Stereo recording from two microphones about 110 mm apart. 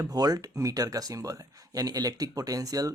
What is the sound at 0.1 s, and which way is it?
Speech, 35° right (ahead or behind).